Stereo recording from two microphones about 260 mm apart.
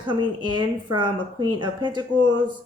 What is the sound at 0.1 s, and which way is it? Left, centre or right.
Speech, centre.